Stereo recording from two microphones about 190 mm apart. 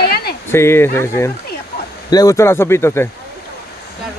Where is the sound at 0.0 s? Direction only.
55° left (ahead or behind).